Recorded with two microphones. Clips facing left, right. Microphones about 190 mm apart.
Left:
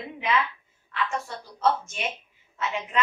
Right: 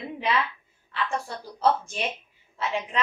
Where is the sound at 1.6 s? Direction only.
35° right (ahead or behind).